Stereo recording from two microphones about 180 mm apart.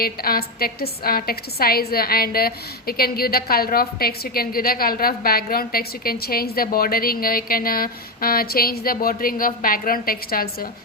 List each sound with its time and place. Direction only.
0.0 s a woman's voice: 55° left (ahead or behind)